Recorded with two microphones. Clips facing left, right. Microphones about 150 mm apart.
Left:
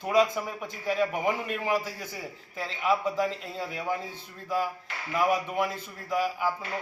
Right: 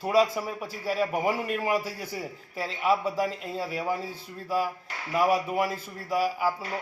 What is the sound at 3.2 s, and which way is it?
Speech, 10° right (ahead or behind).